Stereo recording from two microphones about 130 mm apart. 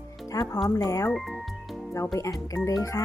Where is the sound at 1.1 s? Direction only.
Centre (ahead or behind).